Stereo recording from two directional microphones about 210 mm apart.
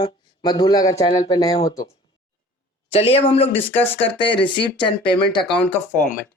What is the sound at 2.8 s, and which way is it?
A man's voice, 25° left (ahead or behind).